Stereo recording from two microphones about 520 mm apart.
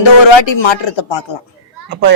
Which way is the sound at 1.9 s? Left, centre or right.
Centre.